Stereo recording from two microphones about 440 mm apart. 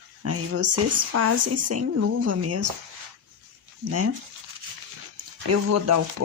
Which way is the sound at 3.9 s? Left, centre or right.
Right.